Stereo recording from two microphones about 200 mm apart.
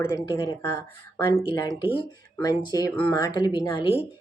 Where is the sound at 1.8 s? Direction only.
25° left (ahead or behind).